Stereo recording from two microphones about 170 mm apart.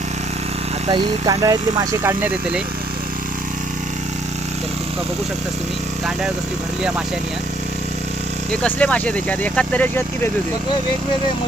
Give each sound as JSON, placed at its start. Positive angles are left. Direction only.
{"t": 0.9, "sound": "speech", "side_deg": -30}
{"t": 8.6, "sound": "speech", "side_deg": 5}